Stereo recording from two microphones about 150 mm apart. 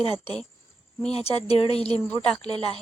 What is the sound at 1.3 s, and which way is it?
Speech, 40° left (ahead or behind).